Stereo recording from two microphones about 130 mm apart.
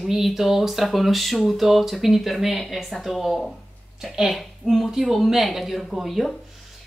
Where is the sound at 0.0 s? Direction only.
Centre (ahead or behind).